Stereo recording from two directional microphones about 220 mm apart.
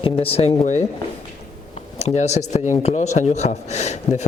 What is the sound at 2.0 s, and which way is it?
Speech, 30° left (ahead or behind).